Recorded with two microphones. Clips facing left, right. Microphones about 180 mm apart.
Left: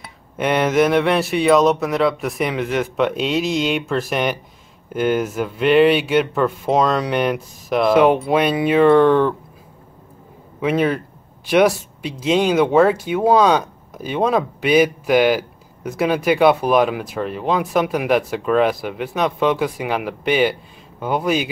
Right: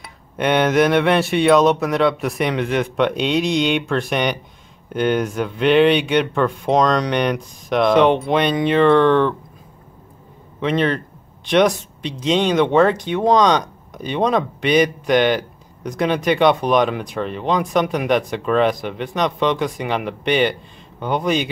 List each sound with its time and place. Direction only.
0.4 s speech: centre (ahead or behind)
10.6 s speech: 10° left (ahead or behind)